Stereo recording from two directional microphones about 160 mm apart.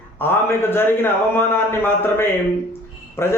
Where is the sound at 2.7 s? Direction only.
15° left (ahead or behind).